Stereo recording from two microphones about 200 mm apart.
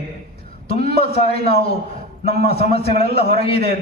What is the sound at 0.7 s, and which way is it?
A man's voice, 30° left (ahead or behind).